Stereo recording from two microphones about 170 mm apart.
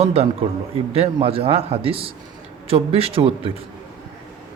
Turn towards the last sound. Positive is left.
turn(degrees=-35)  # may be behind; listen again after turning